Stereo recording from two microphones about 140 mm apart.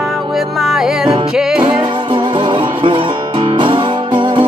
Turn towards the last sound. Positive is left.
turn(degrees=-35)  # may be behind; listen again after turning